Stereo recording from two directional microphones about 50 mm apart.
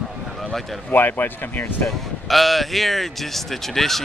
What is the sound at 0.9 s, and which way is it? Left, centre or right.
Speech, left.